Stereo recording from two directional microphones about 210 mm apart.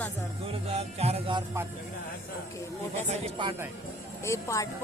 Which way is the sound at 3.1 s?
25° right (ahead or behind).